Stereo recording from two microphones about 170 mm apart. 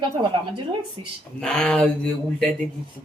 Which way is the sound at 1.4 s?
5° left (ahead or behind).